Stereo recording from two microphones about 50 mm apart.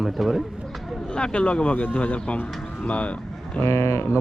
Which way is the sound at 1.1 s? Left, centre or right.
Left.